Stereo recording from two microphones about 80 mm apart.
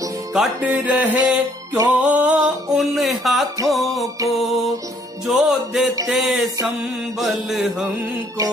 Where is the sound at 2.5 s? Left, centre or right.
Right.